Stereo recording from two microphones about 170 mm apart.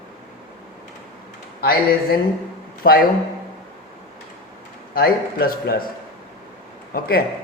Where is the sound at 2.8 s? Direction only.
60° left (ahead or behind).